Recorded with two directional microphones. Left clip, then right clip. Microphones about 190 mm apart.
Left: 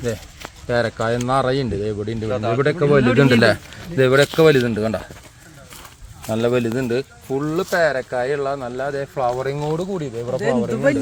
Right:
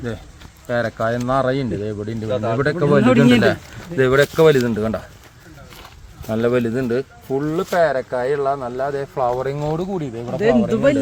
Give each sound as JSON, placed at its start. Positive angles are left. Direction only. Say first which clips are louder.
{"t": 0.7, "sound": "speech", "louder": "even", "side_deg": 70}
{"t": 2.3, "sound": "speech", "louder": "right 1 dB", "side_deg": -25}
{"t": 2.6, "sound": "speech", "louder": "left 1 dB", "side_deg": 35}
{"t": 3.9, "sound": "speech", "louder": "even", "side_deg": 35}
{"t": 6.2, "sound": "speech", "louder": "right 1 dB", "side_deg": 25}
{"t": 10.4, "sound": "speech", "louder": "right 4 dB", "side_deg": -55}